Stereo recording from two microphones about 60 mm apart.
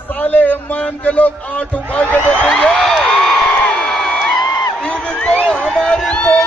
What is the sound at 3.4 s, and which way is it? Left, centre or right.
Crowd, left.